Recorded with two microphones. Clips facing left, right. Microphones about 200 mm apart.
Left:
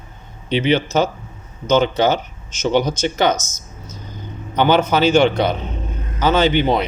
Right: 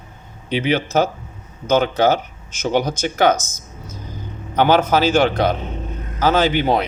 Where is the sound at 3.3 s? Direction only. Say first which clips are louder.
Right 1 dB; 55° right (ahead or behind).